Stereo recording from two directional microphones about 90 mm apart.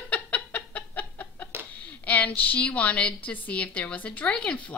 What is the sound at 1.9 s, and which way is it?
A woman's voice, 20° left (ahead or behind).